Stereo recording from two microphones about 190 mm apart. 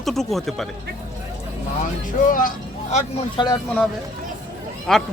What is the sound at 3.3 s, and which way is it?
Speech, 25° left (ahead or behind).